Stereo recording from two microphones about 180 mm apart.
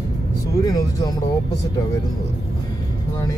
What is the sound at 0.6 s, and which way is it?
Music, 20° left (ahead or behind).